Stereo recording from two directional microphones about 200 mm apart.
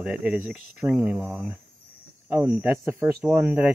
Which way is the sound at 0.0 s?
5° right (ahead or behind).